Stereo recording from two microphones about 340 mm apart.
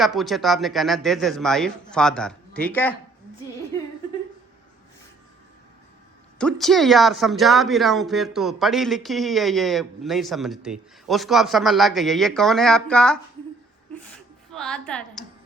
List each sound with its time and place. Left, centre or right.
0.0 s speech: centre
6.4 s speech: centre
14.5 s speech: centre